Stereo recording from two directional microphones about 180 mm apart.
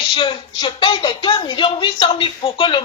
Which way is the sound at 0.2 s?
25° left (ahead or behind).